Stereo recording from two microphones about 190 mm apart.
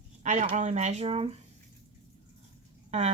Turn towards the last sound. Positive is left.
turn(degrees=-35)  # may be behind; listen again after turning